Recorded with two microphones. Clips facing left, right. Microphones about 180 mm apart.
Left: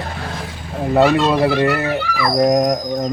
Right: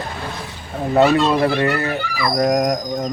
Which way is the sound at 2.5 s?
Centre (ahead or behind).